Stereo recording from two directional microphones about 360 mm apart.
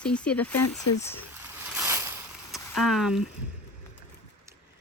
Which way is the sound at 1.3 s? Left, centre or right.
Centre.